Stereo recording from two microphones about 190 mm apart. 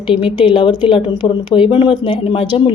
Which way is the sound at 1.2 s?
25° left (ahead or behind).